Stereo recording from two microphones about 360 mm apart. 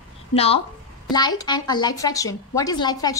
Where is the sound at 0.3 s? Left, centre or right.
Centre.